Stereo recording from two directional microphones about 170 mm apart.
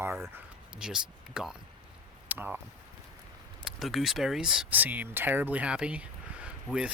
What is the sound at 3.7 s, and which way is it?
Speech, centre (ahead or behind).